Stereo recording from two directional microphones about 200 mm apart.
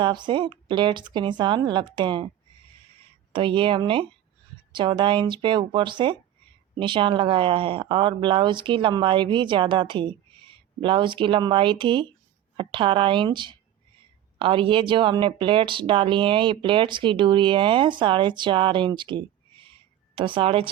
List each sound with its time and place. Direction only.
0.0 s speech: 25° right (ahead or behind)
3.3 s speech: 25° right (ahead or behind)